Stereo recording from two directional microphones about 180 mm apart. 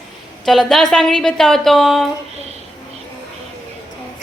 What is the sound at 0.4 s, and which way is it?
A woman's voice, centre (ahead or behind).